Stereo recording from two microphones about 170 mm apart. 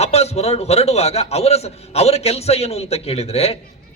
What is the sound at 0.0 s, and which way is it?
A man's voice, 40° left (ahead or behind).